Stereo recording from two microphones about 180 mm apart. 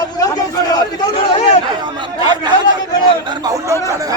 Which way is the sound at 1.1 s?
30° left (ahead or behind).